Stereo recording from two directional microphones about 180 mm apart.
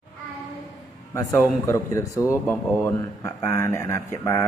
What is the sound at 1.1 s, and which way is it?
Speech, 15° left (ahead or behind).